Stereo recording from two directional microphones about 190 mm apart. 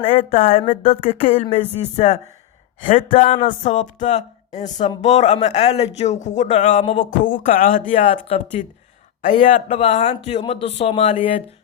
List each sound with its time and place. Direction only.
0.0 s speech: 30° left (ahead or behind)
0.7 s speech: 45° left (ahead or behind)
1.2 s speech: 30° left (ahead or behind)
3.2 s speech: 30° left (ahead or behind)